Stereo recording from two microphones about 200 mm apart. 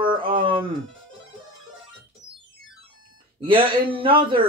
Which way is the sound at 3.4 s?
25° right (ahead or behind).